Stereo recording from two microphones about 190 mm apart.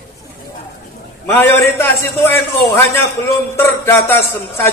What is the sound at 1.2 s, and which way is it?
Speech, 10° left (ahead or behind).